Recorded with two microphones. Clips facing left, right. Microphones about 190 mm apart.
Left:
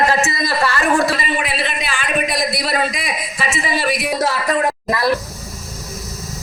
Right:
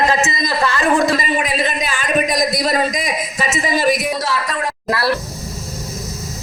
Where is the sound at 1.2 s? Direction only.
40° right (ahead or behind).